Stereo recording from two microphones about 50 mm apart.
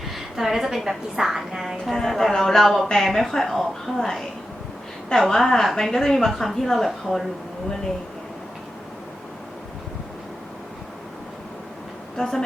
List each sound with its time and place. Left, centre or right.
0.3 s a woman's voice: centre
1.8 s a woman's voice: centre
5.3 s a woman's voice: centre
12.1 s speech: centre